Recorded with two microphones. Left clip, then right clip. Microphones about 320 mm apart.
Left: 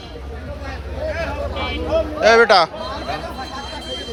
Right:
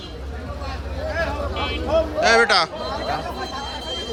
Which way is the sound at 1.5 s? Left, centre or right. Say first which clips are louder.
Left 1 dB; right.